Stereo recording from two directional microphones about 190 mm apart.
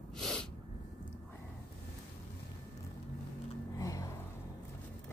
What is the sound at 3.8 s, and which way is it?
Vehicle, 20° left (ahead or behind).